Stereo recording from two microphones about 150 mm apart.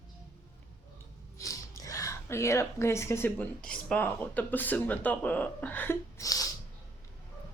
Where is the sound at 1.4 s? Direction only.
20° left (ahead or behind).